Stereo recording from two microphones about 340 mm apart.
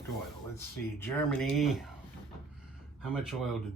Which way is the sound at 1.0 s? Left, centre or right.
Centre.